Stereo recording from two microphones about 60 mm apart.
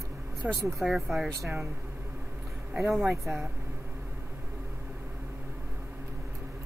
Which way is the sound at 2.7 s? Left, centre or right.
Centre.